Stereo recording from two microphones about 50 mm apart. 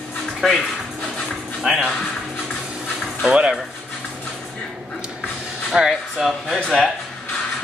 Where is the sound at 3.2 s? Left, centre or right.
Centre.